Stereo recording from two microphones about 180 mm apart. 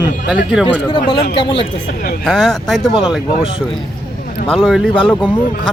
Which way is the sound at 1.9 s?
55° left (ahead or behind).